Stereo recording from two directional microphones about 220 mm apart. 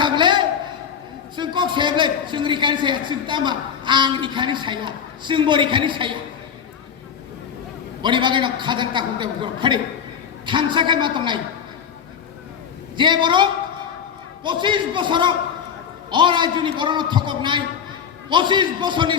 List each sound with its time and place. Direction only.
0.0 s a sound: 20° right (ahead or behind)
1.4 s a man's voice: 20° right (ahead or behind)
8.0 s a man's voice: 20° right (ahead or behind)
13.0 s a man's voice: 20° right (ahead or behind)